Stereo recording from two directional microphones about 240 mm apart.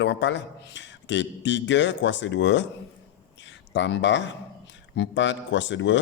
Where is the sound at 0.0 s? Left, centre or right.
Left.